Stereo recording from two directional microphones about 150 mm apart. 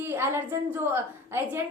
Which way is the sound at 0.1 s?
15° right (ahead or behind).